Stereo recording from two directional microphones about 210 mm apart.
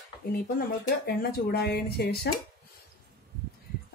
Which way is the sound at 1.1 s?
50° left (ahead or behind).